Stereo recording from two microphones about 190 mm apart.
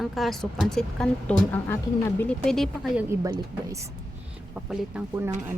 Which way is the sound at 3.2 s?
15° right (ahead or behind).